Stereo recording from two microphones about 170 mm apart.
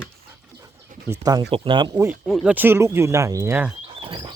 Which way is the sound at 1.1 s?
20° right (ahead or behind).